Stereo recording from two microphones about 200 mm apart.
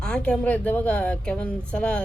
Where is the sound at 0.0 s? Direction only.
5° left (ahead or behind).